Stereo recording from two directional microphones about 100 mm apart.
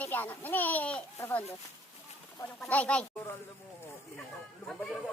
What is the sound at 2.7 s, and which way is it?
Speech, 15° left (ahead or behind).